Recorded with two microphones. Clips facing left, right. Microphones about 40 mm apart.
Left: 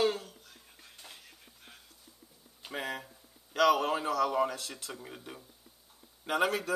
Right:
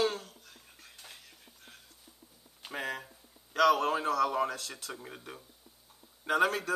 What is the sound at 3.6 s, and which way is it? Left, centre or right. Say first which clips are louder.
Speech: even; centre.